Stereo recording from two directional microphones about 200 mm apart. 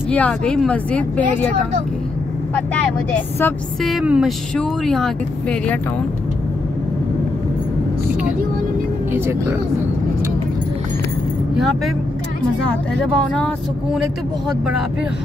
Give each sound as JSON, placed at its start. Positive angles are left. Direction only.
{"t": 0.1, "sound": "speech", "side_deg": 5}
{"t": 3.8, "sound": "speech", "side_deg": -5}
{"t": 9.1, "sound": "speech", "side_deg": -10}
{"t": 11.5, "sound": "speech", "side_deg": 0}
{"t": 12.9, "sound": "speech", "side_deg": 5}